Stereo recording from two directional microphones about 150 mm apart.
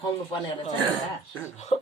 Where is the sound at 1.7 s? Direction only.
45° left (ahead or behind).